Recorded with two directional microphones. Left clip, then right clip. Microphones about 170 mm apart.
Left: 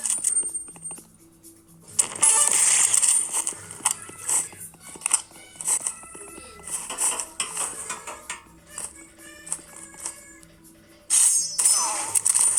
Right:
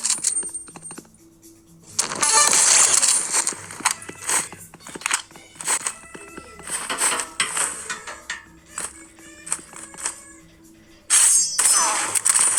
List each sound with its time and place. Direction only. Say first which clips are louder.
0.0 s a sound: right 3 dB; 30° right (ahead or behind)
2.0 s coin: right 6 dB; 30° right (ahead or behind)
5.5 s music: right 4 dB; 30° right (ahead or behind)
6.6 s dishes: right 7 dB; 30° right (ahead or behind)
9.5 s music: right 7 dB; 30° right (ahead or behind)
11.1 s a sound: right 5 dB; 30° right (ahead or behind)